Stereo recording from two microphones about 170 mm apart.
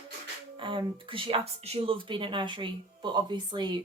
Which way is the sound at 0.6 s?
30° right (ahead or behind).